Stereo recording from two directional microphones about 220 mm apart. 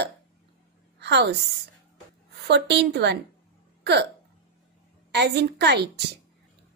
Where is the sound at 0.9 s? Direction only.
50° right (ahead or behind).